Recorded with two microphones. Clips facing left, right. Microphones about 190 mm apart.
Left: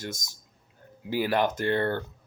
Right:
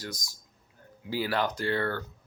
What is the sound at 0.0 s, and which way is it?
Speech, 25° left (ahead or behind).